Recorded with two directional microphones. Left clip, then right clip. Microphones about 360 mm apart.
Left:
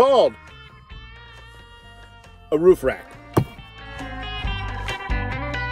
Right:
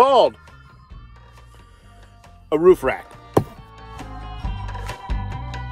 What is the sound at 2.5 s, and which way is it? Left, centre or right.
Speech, centre.